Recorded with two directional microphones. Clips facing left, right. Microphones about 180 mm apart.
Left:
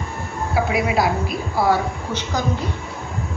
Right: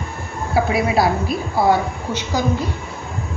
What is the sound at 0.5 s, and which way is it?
A woman's voice, 35° right (ahead or behind).